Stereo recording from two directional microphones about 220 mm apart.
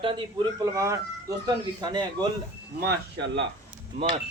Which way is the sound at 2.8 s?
50° right (ahead or behind).